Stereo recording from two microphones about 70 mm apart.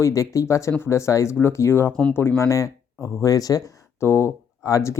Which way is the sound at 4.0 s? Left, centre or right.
Left.